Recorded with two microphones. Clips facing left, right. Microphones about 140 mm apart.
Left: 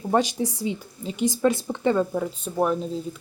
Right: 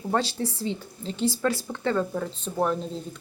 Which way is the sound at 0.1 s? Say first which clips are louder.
Left 4 dB; 15° left (ahead or behind).